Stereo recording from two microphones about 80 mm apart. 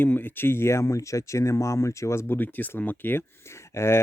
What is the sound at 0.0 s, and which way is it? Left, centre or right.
Speech, left.